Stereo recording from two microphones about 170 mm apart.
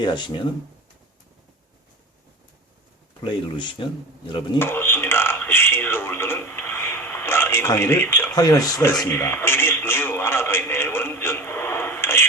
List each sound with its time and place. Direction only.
0.0 s speech: 25° left (ahead or behind)
3.2 s speech: 30° left (ahead or behind)
4.6 s a sound: 10° left (ahead or behind)